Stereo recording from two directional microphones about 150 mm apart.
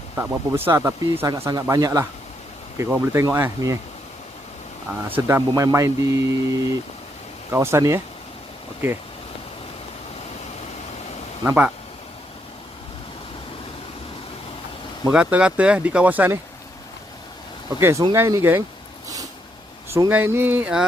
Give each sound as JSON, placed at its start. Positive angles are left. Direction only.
{"t": 0.2, "sound": "speech", "side_deg": -15}
{"t": 5.0, "sound": "speech", "side_deg": -15}
{"t": 11.4, "sound": "speech", "side_deg": -10}
{"t": 15.1, "sound": "speech", "side_deg": -5}
{"t": 17.7, "sound": "speech", "side_deg": -15}
{"t": 19.0, "sound": "a sound", "side_deg": -25}
{"t": 19.9, "sound": "speech", "side_deg": -15}